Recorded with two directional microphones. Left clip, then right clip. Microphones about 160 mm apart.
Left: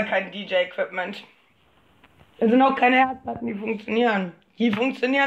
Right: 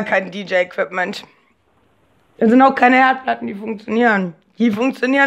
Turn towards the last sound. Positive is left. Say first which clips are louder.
# right 5 dB
turn(degrees=-55)  # may be behind; listen again after turning